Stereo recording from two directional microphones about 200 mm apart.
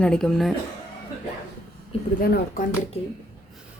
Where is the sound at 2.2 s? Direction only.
45° left (ahead or behind).